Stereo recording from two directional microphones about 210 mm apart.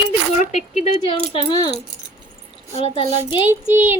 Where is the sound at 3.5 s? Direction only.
10° right (ahead or behind).